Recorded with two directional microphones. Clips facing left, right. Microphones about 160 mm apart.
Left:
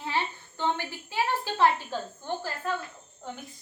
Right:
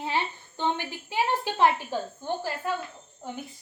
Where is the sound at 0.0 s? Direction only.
20° right (ahead or behind).